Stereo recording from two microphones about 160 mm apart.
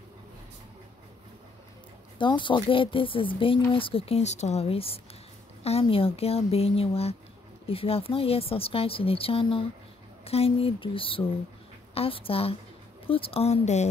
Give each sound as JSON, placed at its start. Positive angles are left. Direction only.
{"t": 2.1, "sound": "speech", "side_deg": 30}